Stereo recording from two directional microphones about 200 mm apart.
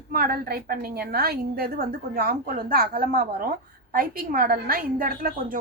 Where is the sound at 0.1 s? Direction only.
45° right (ahead or behind).